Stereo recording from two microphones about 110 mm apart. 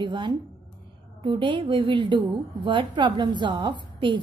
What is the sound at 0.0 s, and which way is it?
A woman's voice, 45° right (ahead or behind).